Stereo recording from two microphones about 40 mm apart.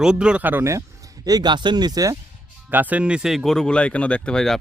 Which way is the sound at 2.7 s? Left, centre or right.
Right.